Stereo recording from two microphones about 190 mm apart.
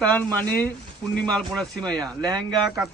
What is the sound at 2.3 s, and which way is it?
Speech, 20° right (ahead or behind).